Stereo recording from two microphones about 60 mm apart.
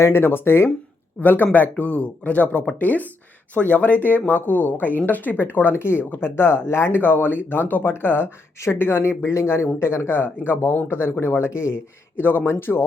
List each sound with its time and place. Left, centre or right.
0.0 s speech: left
1.2 s speech: left
12.2 s speech: left